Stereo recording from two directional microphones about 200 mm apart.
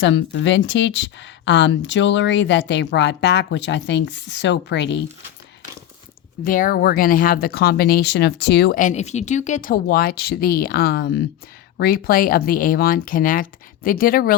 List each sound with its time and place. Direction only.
0.0 s a woman's voice: 60° left (ahead or behind)
6.4 s speech: 45° left (ahead or behind)